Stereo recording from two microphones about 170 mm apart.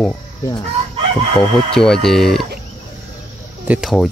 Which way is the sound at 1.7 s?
5° left (ahead or behind).